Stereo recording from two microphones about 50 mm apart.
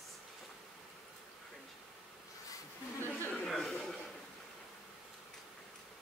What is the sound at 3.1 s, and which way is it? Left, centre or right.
Chatter, left.